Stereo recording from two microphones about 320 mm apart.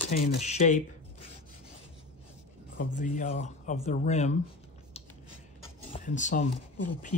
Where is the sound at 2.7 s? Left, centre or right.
Left.